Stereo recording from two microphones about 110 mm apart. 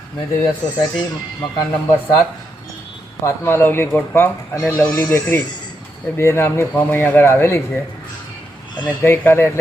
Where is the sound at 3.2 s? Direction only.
25° left (ahead or behind).